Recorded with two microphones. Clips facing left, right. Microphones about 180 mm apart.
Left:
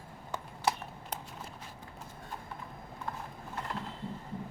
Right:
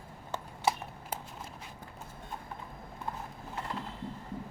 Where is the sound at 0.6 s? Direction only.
5° right (ahead or behind).